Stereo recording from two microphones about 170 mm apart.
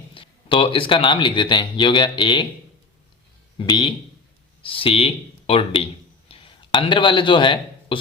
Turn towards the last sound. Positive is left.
turn(degrees=30)  # may be behind; listen again after turning